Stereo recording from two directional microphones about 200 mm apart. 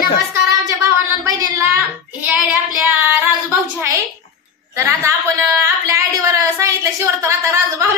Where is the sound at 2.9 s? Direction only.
10° right (ahead or behind).